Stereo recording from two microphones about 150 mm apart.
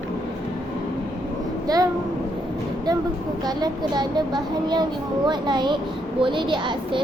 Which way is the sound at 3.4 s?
30° right (ahead or behind).